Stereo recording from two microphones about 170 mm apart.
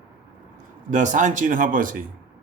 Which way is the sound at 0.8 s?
50° right (ahead or behind).